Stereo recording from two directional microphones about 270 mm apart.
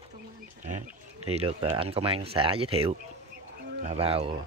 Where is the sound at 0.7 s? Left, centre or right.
Right.